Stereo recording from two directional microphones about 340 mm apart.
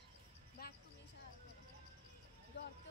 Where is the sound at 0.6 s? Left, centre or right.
Left.